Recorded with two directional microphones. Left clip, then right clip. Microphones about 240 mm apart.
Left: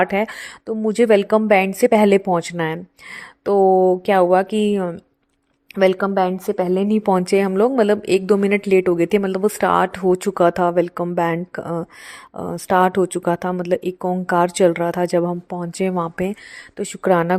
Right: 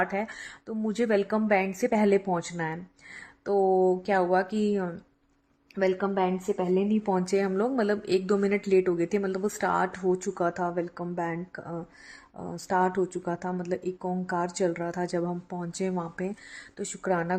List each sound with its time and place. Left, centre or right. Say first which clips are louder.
0.0 s a woman's voice: left 10 dB; left